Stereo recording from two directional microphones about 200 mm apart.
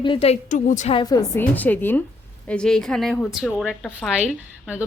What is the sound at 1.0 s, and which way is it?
Speech, 20° left (ahead or behind).